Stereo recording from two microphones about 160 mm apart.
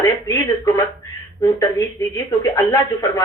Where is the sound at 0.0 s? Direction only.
20° left (ahead or behind).